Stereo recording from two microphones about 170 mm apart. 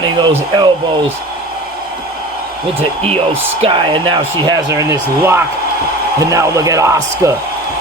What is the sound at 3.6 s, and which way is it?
Speech, 30° right (ahead or behind).